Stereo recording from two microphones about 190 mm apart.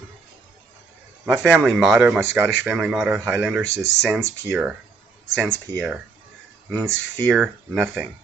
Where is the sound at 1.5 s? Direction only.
5° right (ahead or behind).